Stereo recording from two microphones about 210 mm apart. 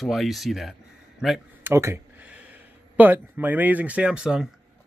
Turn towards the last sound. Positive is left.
turn(degrees=-5)  # may be behind; listen again after turning